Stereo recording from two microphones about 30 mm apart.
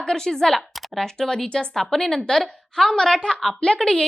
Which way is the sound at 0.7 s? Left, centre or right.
Centre.